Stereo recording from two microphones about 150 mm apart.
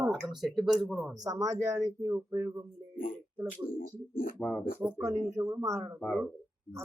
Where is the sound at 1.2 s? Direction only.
20° right (ahead or behind).